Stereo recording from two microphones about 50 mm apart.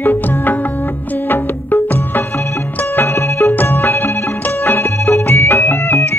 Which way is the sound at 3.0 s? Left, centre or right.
Left.